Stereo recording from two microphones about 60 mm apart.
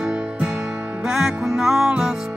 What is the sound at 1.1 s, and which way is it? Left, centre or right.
Music, centre.